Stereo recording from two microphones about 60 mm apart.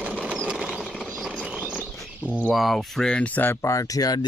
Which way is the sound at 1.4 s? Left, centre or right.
Centre.